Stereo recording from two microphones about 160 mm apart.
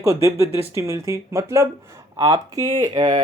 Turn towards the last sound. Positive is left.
turn(degrees=-25)  # may be behind; listen again after turning